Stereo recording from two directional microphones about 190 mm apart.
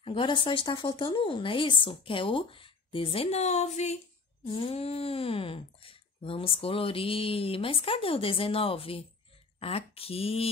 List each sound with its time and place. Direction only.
0.0 s speech: 25° left (ahead or behind)